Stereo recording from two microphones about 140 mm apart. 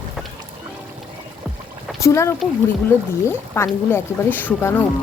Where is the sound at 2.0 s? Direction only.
20° left (ahead or behind).